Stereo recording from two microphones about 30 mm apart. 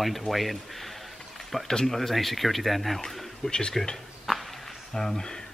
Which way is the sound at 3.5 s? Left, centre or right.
Left.